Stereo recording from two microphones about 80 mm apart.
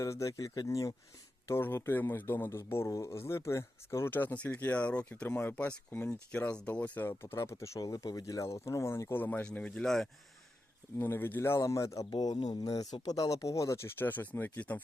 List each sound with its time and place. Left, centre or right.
0.0 s speech: left
1.5 s speech: left
4.1 s speech: left
7.0 s speech: left
7.8 s speech: left
9.4 s speech: centre
11.0 s speech: left
11.6 s speech: left
12.1 s speech: left
14.0 s speech: left